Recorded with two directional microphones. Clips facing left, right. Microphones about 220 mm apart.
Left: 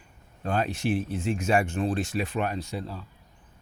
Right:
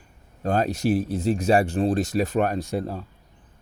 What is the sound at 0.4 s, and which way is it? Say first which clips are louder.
Speech: right 5 dB; 40° right (ahead or behind).